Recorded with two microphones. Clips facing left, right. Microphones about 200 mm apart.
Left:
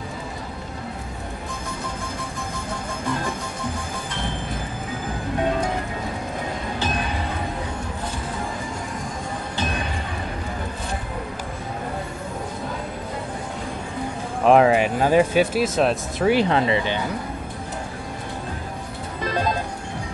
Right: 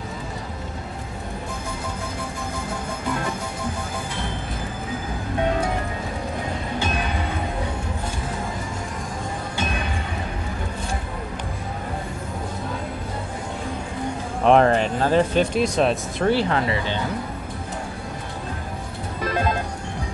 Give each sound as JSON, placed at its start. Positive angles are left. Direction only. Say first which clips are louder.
{"t": 14.4, "sound": "speech", "louder": "left 1 dB", "side_deg": 5}
{"t": 16.3, "sound": "speech", "louder": "left 2 dB", "side_deg": 20}